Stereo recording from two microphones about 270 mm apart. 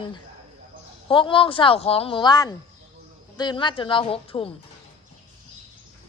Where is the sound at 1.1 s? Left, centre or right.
Centre.